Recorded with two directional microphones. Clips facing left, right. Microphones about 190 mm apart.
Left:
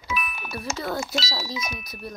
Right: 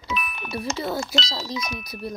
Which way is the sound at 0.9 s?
Centre (ahead or behind).